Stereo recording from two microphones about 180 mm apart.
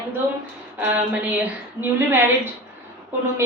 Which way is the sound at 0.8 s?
10° right (ahead or behind).